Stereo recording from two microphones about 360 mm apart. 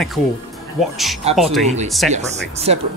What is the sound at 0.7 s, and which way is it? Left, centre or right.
Speech, centre.